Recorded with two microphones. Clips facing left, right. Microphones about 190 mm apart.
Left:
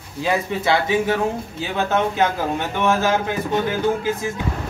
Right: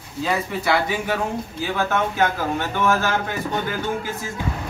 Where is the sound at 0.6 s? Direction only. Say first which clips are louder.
Left 3 dB; 25° left (ahead or behind).